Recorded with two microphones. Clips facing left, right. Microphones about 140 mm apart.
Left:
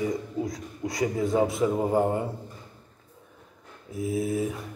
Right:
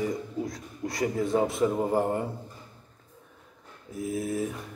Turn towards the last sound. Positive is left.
turn(degrees=0)  # may be behind; listen again after turning